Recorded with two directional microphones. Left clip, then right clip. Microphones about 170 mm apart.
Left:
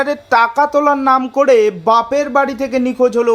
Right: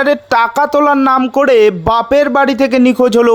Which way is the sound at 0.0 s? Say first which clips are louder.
Right 2 dB; 45° right (ahead or behind).